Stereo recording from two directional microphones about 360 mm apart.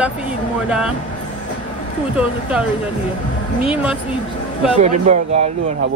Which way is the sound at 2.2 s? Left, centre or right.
Centre.